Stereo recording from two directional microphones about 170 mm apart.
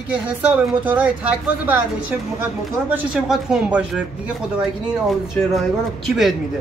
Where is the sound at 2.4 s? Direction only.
10° right (ahead or behind).